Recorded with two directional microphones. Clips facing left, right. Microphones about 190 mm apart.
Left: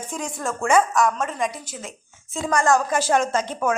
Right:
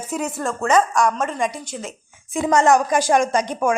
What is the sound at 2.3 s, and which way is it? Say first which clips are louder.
A woman's voice: right 4 dB; 20° right (ahead or behind).